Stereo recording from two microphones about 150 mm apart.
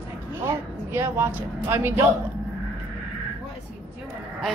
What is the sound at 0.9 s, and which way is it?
Speech, 15° right (ahead or behind).